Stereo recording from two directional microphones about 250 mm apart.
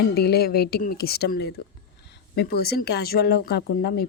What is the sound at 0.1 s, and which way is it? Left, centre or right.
Speech, left.